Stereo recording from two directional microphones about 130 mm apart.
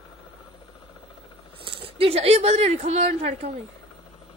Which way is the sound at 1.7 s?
45° right (ahead or behind).